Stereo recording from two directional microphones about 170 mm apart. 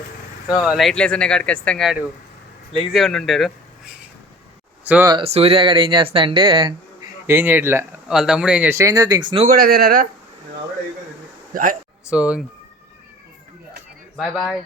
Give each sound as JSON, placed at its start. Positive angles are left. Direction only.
{"t": 0.4, "sound": "speech", "side_deg": -5}
{"t": 4.9, "sound": "speech", "side_deg": -10}
{"t": 5.1, "sound": "speech", "side_deg": -35}
{"t": 7.3, "sound": "speech", "side_deg": -10}
{"t": 9.5, "sound": "speech", "side_deg": -65}
{"t": 11.5, "sound": "speech", "side_deg": -55}
{"t": 12.1, "sound": "speech", "side_deg": -5}
{"t": 14.2, "sound": "speech", "side_deg": 0}